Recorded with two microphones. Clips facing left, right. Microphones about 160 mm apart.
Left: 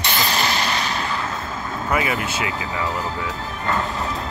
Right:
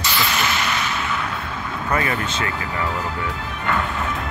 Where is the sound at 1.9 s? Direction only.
10° left (ahead or behind).